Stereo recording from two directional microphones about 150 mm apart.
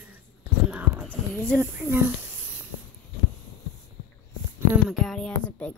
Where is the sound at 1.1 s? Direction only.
5° left (ahead or behind).